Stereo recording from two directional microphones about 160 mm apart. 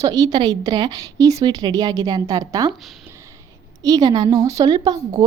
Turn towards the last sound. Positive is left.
turn(degrees=-25)  # may be behind; listen again after turning